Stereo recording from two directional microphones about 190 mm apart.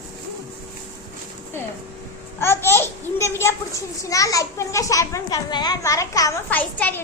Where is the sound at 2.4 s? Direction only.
15° left (ahead or behind).